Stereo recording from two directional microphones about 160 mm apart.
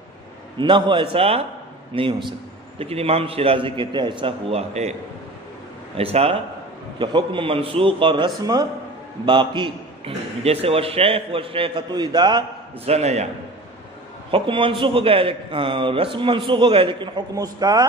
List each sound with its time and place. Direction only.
0.6 s a man's voice: 30° right (ahead or behind)
5.9 s a man's voice: 40° right (ahead or behind)
12.8 s a man's voice: 40° right (ahead or behind)
14.3 s a man's voice: 35° right (ahead or behind)